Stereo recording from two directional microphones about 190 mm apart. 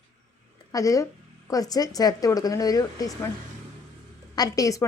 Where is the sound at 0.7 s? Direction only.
15° left (ahead or behind).